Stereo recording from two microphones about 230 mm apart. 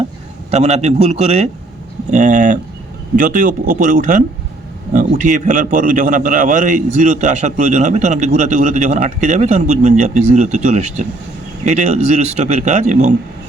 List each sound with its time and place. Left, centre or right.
0.5 s a man's voice: right